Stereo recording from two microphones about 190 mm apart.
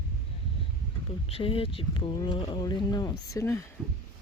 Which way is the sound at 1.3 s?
30° left (ahead or behind).